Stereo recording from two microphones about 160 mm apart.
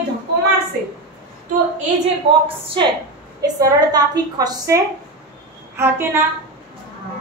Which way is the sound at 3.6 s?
25° right (ahead or behind).